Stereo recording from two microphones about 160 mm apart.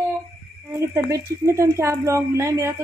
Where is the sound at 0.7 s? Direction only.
20° right (ahead or behind).